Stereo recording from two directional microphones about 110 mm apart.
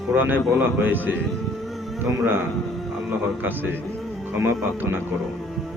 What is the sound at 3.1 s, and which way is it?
A man's voice, 15° right (ahead or behind).